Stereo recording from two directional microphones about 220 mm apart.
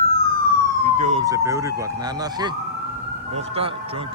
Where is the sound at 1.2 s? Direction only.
15° right (ahead or behind).